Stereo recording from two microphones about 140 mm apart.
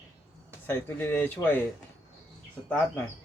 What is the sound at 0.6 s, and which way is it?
Speech, 15° left (ahead or behind).